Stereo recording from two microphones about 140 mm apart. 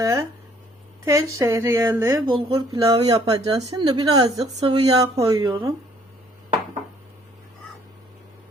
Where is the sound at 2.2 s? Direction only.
40° right (ahead or behind).